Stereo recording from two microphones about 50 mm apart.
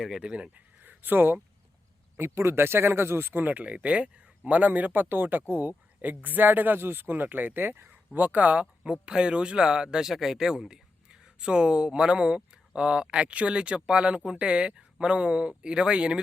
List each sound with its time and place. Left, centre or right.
0.2 s speech: right
0.8 s a sound: right
2.1 s speech: right
3.4 s speech: right
8.8 s speech: centre